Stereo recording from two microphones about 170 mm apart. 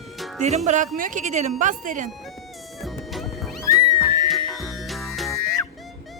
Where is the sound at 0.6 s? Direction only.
45° right (ahead or behind).